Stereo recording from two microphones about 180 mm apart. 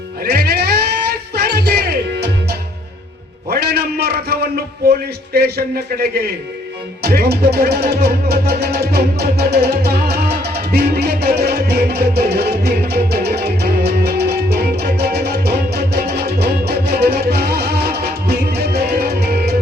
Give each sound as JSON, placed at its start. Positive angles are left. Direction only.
{"t": 0.3, "sound": "music", "side_deg": -60}
{"t": 3.5, "sound": "a sound", "side_deg": -60}
{"t": 4.9, "sound": "a man's voice", "side_deg": -60}
{"t": 7.0, "sound": "music", "side_deg": -60}